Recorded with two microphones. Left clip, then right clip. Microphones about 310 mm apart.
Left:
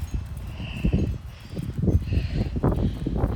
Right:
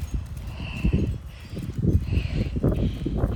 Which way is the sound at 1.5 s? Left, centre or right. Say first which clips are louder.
Left 1 dB; centre.